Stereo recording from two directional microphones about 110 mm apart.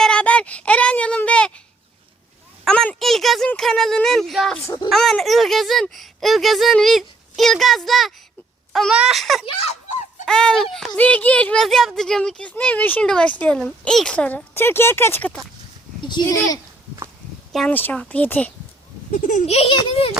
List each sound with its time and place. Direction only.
0.0 s a sound: 10° left (ahead or behind)
2.6 s speech: 5° left (ahead or behind)
8.7 s wail: centre (ahead or behind)
9.0 s speech: centre (ahead or behind)
10.9 s speech: 15° left (ahead or behind)
16.0 s speech: 40° left (ahead or behind)
17.7 s speech: 15° left (ahead or behind)
19.5 s a child's voice: 60° left (ahead or behind)